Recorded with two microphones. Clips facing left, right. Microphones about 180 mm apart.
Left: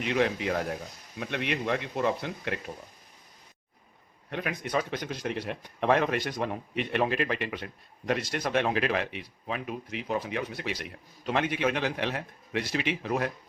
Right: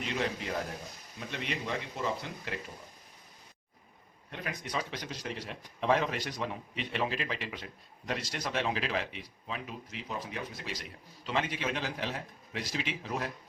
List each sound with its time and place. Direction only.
0.0 s speech: 65° left (ahead or behind)
4.3 s speech: 65° left (ahead or behind)